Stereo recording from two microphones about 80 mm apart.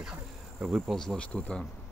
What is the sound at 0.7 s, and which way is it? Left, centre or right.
Speech, centre.